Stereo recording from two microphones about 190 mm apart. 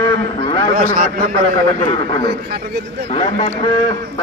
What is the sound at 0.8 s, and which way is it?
Speech, 45° right (ahead or behind).